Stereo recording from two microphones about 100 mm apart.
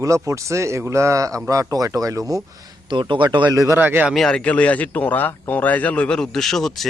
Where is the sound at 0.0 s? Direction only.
30° right (ahead or behind).